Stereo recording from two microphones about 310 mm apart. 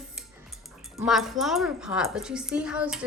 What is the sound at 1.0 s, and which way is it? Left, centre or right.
A woman's voice, centre.